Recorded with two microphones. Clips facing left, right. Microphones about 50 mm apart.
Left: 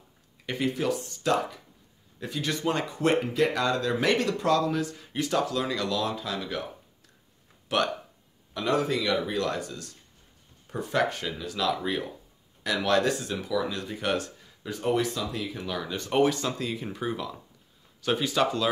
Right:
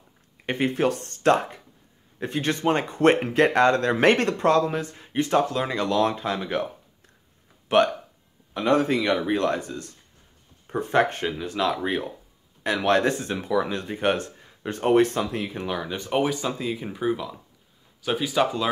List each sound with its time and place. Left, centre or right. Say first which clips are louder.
0.5 s speech: right 4 dB; right
7.6 s speech: right 7 dB; right
14.7 s speech: right 7 dB; right
15.7 s speech: right 1 dB; centre